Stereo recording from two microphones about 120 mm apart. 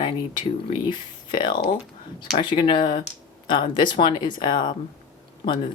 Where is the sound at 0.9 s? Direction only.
40° left (ahead or behind).